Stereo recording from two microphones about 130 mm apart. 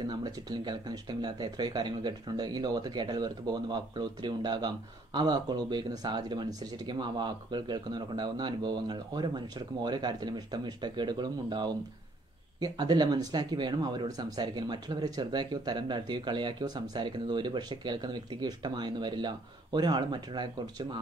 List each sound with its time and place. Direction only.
0.0 s speech: 30° right (ahead or behind)